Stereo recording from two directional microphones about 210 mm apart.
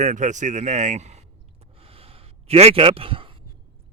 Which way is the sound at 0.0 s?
35° right (ahead or behind).